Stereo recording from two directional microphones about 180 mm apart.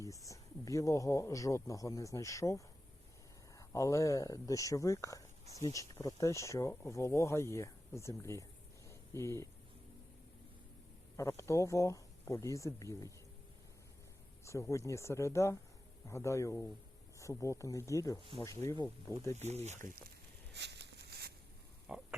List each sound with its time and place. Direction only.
0.0 s speech: 20° left (ahead or behind)
8.9 s a sound: 15° left (ahead or behind)
11.2 s speech: 15° left (ahead or behind)
14.4 s speech: 15° left (ahead or behind)
19.4 s speech: 40° right (ahead or behind)
20.0 s a sound: 65° right (ahead or behind)
21.9 s pig: 5° right (ahead or behind)